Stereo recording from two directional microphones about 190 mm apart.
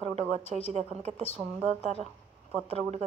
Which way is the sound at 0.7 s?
35° right (ahead or behind).